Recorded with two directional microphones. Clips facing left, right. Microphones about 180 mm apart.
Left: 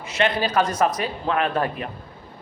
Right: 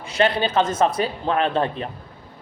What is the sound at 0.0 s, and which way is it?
A man's voice, 30° right (ahead or behind).